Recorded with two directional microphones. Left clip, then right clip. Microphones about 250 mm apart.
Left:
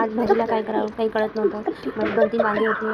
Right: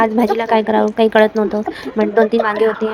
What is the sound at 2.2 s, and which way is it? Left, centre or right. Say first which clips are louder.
Speech: right 6 dB; right.